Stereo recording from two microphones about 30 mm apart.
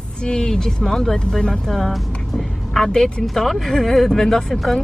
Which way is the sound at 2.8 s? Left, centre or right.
Centre.